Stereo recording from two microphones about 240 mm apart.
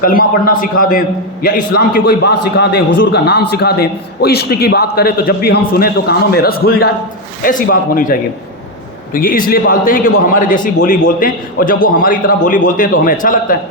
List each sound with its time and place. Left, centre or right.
0.0 s a man's voice: left